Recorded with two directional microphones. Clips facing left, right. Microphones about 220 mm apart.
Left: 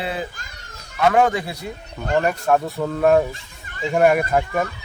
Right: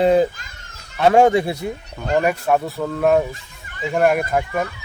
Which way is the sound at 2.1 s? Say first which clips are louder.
Right 1 dB; 10° right (ahead or behind).